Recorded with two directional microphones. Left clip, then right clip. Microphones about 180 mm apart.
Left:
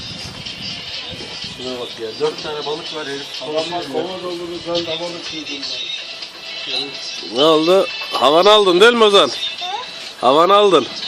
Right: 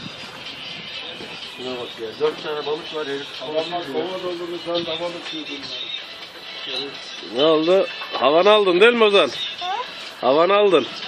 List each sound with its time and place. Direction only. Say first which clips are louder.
2.2 s speech: left 1 dB; 45° left (ahead or behind)
7.3 s speech: left 4 dB; 20° left (ahead or behind)